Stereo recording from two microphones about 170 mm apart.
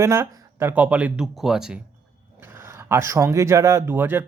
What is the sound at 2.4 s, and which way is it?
Speech, 15° right (ahead or behind).